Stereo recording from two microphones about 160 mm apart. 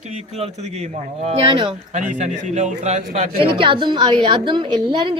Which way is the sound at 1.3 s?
40° right (ahead or behind).